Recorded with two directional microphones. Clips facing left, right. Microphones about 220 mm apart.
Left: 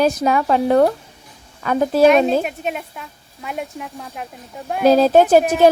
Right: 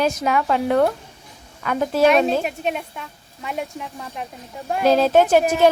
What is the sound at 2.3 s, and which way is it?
Speech, centre (ahead or behind).